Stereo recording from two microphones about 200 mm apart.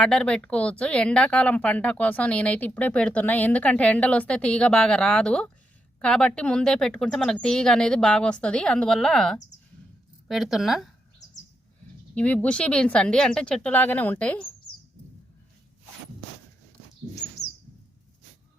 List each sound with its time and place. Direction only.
0.0 s a woman's voice: 5° left (ahead or behind)
12.1 s a woman's voice: 5° left (ahead or behind)